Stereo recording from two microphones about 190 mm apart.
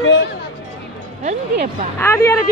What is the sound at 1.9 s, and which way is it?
Speech, 15° left (ahead or behind).